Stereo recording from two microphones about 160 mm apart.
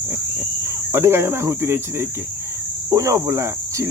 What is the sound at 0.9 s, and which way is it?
Cricket, 15° right (ahead or behind).